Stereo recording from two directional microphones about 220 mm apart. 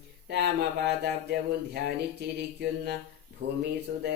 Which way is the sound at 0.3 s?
50° right (ahead or behind).